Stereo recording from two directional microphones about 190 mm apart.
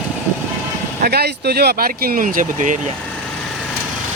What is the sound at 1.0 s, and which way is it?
Speech, 55° right (ahead or behind).